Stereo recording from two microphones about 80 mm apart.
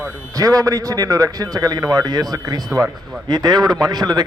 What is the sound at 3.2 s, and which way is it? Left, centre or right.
A man's voice, right.